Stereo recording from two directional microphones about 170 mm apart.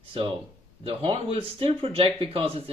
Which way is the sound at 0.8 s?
35° right (ahead or behind).